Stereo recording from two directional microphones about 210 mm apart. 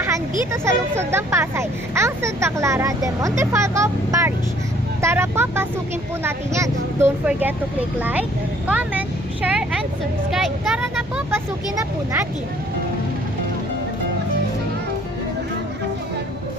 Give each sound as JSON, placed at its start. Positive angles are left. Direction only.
{"t": 0.5, "sound": "speech", "side_deg": -10}